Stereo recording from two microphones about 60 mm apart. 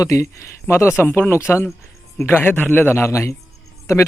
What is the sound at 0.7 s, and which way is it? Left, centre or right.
Speech, left.